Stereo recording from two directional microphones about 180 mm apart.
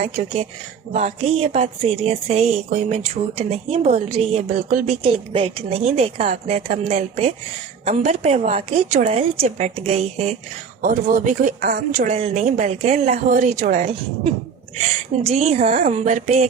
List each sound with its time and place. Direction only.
0.0 s a woman's voice: 35° right (ahead or behind)
5.0 s a woman's voice: 30° right (ahead or behind)
10.8 s speech: 50° right (ahead or behind)
12.0 s a woman's voice: 35° right (ahead or behind)